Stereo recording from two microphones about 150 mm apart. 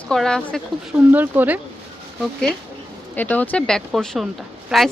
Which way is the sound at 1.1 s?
10° right (ahead or behind).